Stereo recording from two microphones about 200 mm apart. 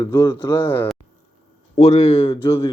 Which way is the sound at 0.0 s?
15° left (ahead or behind).